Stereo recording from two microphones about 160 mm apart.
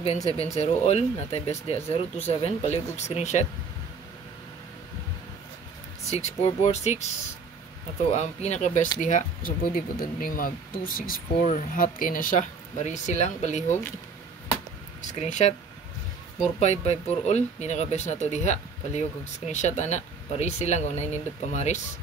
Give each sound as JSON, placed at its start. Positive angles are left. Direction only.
{"t": 0.0, "sound": "speech", "side_deg": 40}
{"t": 6.0, "sound": "speech", "side_deg": 40}
{"t": 8.0, "sound": "speech", "side_deg": 45}
{"t": 15.0, "sound": "speech", "side_deg": 45}
{"t": 16.5, "sound": "speech", "side_deg": 45}